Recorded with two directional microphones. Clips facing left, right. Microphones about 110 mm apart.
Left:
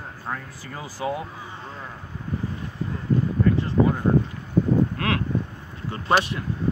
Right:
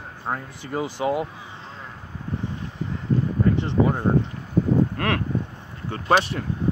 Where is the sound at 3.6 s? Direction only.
25° right (ahead or behind).